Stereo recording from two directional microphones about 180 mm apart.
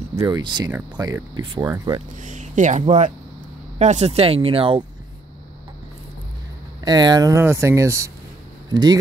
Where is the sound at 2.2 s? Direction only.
45° right (ahead or behind).